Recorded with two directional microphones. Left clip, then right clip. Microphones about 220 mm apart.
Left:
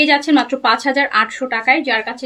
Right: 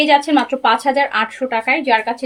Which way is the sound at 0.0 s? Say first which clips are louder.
Even; 20° left (ahead or behind).